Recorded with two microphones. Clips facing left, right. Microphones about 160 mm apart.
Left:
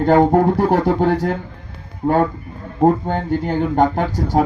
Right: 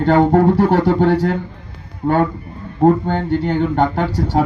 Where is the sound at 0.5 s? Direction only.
40° left (ahead or behind).